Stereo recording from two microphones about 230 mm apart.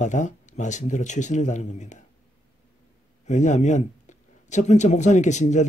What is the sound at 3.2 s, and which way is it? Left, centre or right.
Speech, left.